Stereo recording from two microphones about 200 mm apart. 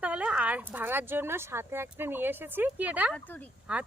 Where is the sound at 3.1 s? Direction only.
10° left (ahead or behind).